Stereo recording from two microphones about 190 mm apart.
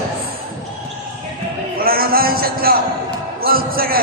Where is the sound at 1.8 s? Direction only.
50° right (ahead or behind).